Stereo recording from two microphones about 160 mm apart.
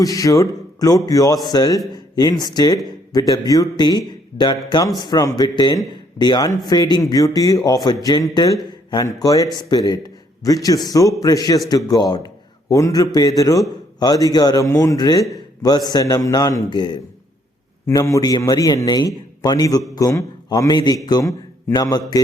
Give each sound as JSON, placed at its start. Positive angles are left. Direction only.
{"t": 0.0, "sound": "a man's voice", "side_deg": 20}